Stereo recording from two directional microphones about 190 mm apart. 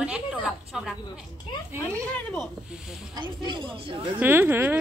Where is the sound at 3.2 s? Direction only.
25° right (ahead or behind).